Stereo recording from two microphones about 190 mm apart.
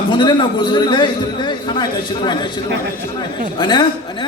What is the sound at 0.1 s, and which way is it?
A man's voice, 25° left (ahead or behind).